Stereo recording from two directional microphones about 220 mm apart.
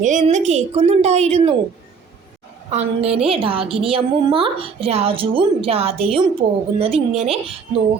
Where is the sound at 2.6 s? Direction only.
30° right (ahead or behind).